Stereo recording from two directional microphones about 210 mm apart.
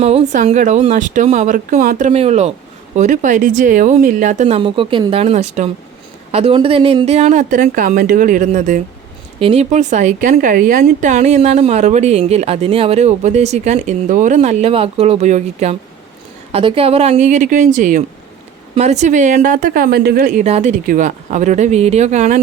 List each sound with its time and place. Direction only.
0.0 s speech: 30° right (ahead or behind)